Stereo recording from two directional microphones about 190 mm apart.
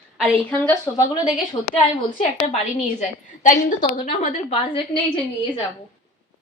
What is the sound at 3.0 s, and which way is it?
A woman's voice, 40° left (ahead or behind).